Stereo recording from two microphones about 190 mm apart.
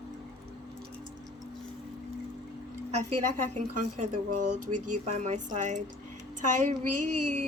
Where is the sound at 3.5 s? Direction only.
40° right (ahead or behind).